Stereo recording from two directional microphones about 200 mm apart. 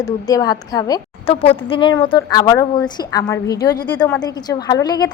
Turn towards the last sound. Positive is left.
turn(degrees=20)  # may be behind; listen again after turning